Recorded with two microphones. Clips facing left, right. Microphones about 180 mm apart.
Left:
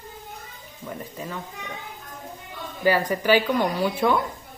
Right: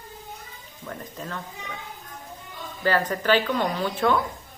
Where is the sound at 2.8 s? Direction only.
10° left (ahead or behind).